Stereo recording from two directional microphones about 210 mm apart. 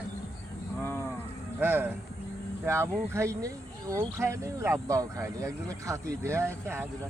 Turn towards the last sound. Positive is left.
turn(degrees=-10)  # may be behind; listen again after turning